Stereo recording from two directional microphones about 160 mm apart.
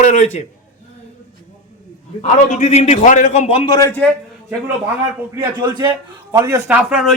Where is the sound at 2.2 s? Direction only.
45° left (ahead or behind).